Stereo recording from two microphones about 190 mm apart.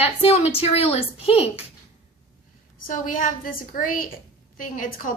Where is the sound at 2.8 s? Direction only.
45° left (ahead or behind).